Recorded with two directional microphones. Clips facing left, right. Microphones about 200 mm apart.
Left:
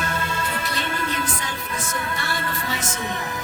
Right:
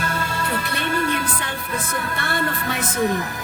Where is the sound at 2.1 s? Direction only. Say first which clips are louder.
Right 4 dB; 60° right (ahead or behind).